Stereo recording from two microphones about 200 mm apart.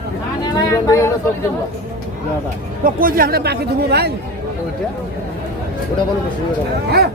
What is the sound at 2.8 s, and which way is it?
Speech, 45° right (ahead or behind).